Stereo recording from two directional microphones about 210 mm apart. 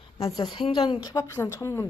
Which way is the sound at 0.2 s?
20° left (ahead or behind).